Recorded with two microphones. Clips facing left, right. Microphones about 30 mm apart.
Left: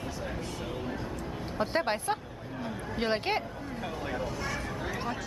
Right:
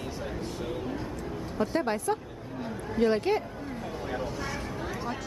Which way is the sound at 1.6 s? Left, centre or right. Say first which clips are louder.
Right 1 dB; left.